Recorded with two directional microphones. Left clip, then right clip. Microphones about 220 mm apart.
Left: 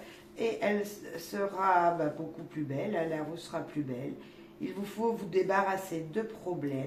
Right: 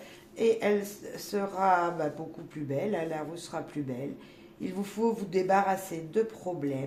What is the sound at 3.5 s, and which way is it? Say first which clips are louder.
Speech: right 1 dB; 45° right (ahead or behind).